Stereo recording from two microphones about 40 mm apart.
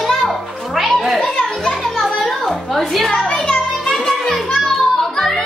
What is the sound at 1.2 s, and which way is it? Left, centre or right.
Speech, centre.